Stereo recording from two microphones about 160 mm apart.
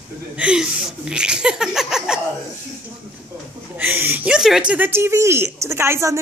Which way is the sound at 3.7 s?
10° right (ahead or behind).